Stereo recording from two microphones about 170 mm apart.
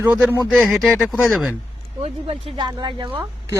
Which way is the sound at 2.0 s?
35° right (ahead or behind).